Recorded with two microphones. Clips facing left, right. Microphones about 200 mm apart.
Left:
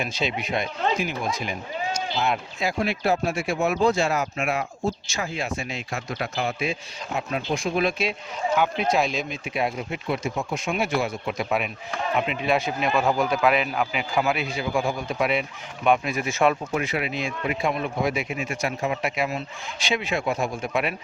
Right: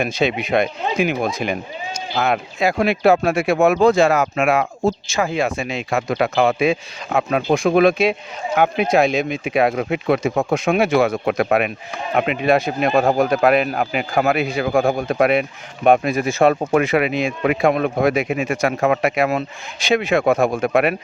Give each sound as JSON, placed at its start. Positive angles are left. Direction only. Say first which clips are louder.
{"t": 0.0, "sound": "speech", "louder": "right 8 dB", "side_deg": -65}
{"t": 7.5, "sound": "speech", "louder": "right 10 dB", "side_deg": -55}
{"t": 12.5, "sound": "speech", "louder": "right 7 dB", "side_deg": -40}
{"t": 16.6, "sound": "speech", "louder": "right 10 dB", "side_deg": -80}
{"t": 18.4, "sound": "speech", "louder": "right 9 dB", "side_deg": -85}